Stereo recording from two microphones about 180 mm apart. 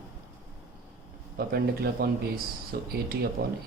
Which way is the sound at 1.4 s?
60° right (ahead or behind).